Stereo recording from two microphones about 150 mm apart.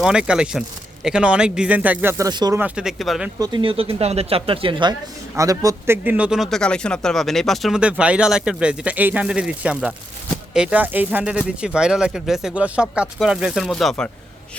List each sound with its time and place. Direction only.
0.0 s speech: 5° right (ahead or behind); by 2.6 s 25° right (ahead or behind)
2.6 s speech: 10° right (ahead or behind)
3.3 s speech: 30° right (ahead or behind); by 14.1 s 5° left (ahead or behind)